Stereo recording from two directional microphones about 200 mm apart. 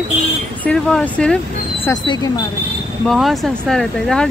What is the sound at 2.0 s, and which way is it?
Speech, 20° left (ahead or behind).